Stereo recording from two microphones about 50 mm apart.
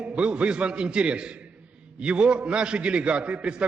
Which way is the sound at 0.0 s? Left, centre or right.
Right.